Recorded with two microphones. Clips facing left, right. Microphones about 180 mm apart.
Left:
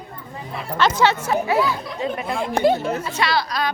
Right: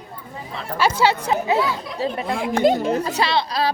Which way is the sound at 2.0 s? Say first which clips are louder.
Right 1 dB; 35° right (ahead or behind).